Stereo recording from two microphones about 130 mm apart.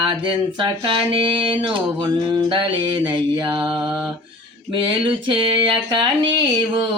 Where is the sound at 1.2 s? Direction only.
40° right (ahead or behind).